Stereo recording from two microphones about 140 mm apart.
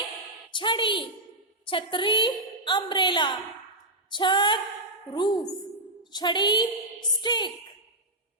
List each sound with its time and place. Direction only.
0.5 s a woman's voice: 35° left (ahead or behind)